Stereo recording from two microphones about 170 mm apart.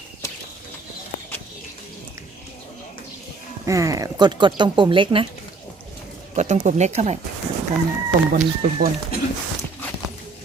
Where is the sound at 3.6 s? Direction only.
20° right (ahead or behind).